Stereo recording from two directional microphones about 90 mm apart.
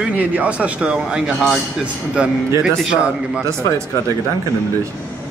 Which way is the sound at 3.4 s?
35° right (ahead or behind).